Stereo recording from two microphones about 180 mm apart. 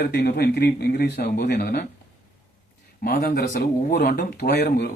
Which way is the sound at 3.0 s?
55° left (ahead or behind).